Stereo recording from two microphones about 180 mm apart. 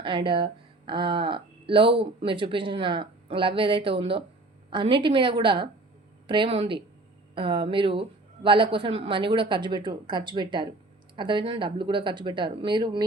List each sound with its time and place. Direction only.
0.0 s speech: 30° right (ahead or behind)